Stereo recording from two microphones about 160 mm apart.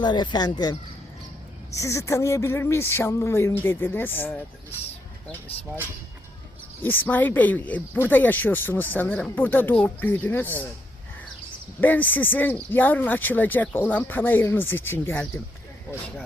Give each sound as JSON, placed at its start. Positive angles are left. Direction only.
{"t": 0.0, "sound": "speech", "side_deg": 30}
{"t": 6.8, "sound": "speech", "side_deg": 10}
{"t": 11.8, "sound": "speech", "side_deg": 10}